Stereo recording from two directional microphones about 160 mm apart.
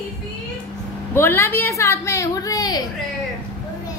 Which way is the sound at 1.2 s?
15° left (ahead or behind).